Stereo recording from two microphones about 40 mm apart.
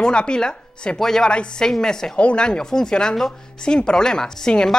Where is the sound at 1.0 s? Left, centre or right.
Centre.